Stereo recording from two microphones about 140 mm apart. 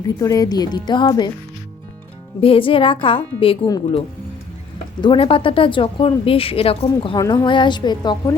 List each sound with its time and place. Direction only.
0.2 s speech: 25° left (ahead or behind)
2.4 s speech: 40° left (ahead or behind)
4.9 s speech: 35° left (ahead or behind)
7.2 s speech: 25° left (ahead or behind)